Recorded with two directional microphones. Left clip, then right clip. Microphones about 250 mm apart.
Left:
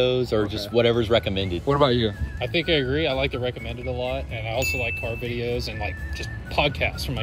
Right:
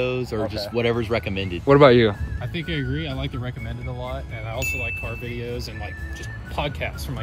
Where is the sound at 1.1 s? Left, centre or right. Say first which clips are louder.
Left 3 dB; right.